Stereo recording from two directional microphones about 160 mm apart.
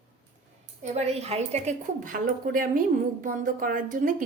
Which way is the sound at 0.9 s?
40° right (ahead or behind).